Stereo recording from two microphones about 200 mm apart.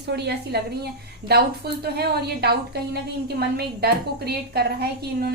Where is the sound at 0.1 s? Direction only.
55° right (ahead or behind).